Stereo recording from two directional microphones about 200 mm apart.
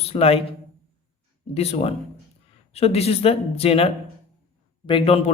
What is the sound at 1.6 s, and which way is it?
Speech, 30° left (ahead or behind).